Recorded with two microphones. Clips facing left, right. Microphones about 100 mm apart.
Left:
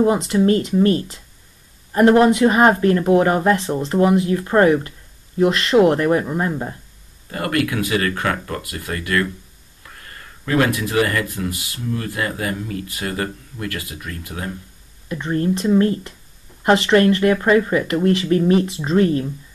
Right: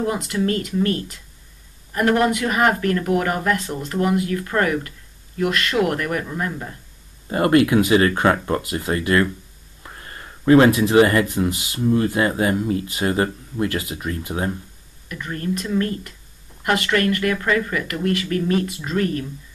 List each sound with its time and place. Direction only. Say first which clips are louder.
0.0 s speech: left 6 dB; 25° left (ahead or behind)
7.2 s speech: right 6 dB; 25° right (ahead or behind)
15.0 s speech: left 6 dB; 30° left (ahead or behind)